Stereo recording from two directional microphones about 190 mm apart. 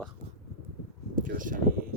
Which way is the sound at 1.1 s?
45° right (ahead or behind).